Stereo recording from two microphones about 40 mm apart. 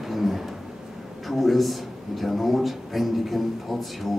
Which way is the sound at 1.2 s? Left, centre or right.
Centre.